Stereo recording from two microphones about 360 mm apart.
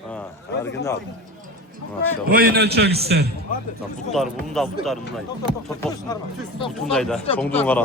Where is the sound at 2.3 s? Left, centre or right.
Right.